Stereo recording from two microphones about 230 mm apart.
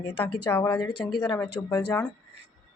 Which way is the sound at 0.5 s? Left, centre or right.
Centre.